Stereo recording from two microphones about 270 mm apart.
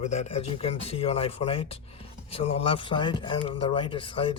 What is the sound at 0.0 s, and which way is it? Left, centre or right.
Speech, left.